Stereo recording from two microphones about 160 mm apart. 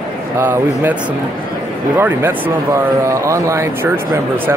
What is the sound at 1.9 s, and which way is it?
Speech, 15° right (ahead or behind).